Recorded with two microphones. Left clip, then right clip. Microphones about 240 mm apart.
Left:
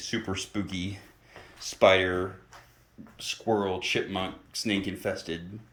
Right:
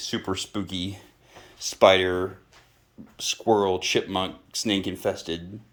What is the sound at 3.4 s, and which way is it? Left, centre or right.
Speech, right.